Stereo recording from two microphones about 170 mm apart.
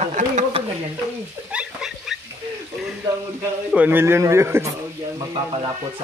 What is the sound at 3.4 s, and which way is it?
A man's voice, 10° right (ahead or behind).